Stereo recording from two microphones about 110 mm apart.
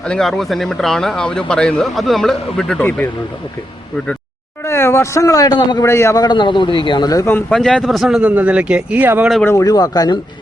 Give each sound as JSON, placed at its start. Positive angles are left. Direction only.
{"t": 0.0, "sound": "speech", "side_deg": 5}
{"t": 4.6, "sound": "speech", "side_deg": 25}
{"t": 5.8, "sound": "a man's voice", "side_deg": 25}
{"t": 6.2, "sound": "a man's voice", "side_deg": 45}
{"t": 7.5, "sound": "speech", "side_deg": 5}
{"t": 9.4, "sound": "speech", "side_deg": 25}